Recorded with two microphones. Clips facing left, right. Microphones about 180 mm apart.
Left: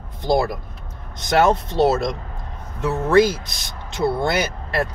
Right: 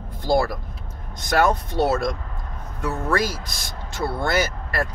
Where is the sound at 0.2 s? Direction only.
20° left (ahead or behind).